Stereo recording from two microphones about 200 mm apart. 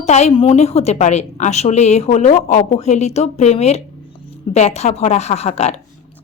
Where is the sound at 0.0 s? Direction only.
35° left (ahead or behind).